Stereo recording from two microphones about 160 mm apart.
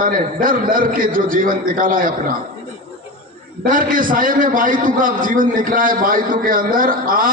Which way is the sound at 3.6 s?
60° right (ahead or behind).